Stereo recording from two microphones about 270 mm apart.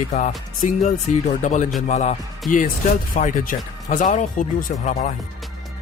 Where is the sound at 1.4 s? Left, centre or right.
Left.